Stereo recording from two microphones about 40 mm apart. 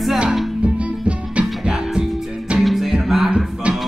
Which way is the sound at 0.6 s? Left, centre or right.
Right.